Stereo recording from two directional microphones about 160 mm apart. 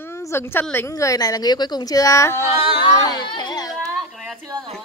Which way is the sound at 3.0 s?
25° left (ahead or behind).